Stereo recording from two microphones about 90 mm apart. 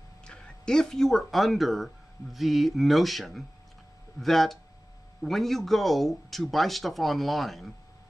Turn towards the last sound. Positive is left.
turn(degrees=0)  # may be behind; listen again after turning